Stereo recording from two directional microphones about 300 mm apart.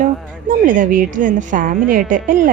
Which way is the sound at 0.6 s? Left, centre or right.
Right.